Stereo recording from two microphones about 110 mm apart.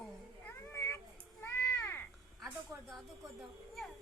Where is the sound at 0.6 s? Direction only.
25° left (ahead or behind).